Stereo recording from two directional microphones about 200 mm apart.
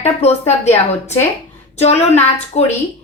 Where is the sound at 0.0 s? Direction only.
35° left (ahead or behind).